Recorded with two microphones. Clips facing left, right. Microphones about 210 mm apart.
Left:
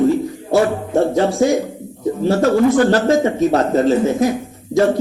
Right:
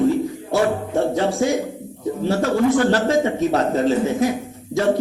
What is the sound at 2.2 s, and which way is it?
A man's voice, 45° left (ahead or behind).